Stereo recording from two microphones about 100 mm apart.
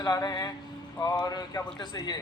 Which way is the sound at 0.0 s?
35° left (ahead or behind).